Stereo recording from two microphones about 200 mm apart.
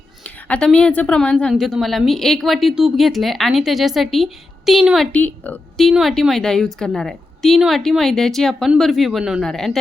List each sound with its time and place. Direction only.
0.4 s a woman's voice: 5° left (ahead or behind)